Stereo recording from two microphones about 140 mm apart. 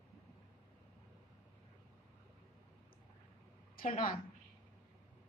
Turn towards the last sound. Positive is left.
turn(degrees=90)